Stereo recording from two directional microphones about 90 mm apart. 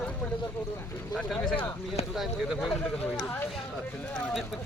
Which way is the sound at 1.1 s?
5° left (ahead or behind).